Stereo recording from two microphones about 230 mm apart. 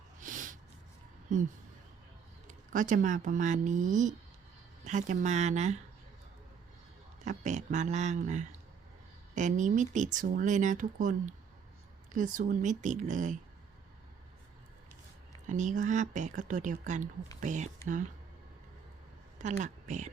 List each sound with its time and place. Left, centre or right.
0.2 s snort: right
2.5 s speech: right
7.3 s speech: right
15.4 s speech: right
19.4 s speech: right